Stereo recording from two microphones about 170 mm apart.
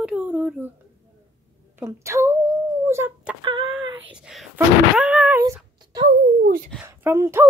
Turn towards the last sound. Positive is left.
turn(degrees=-15)  # may be behind; listen again after turning